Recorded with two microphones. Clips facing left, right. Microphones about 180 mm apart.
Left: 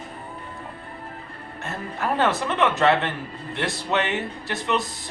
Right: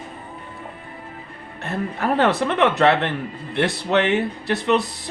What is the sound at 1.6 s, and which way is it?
Speech, 65° right (ahead or behind).